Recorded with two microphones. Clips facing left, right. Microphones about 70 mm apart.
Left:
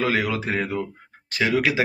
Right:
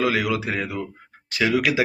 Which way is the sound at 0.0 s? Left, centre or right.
Left.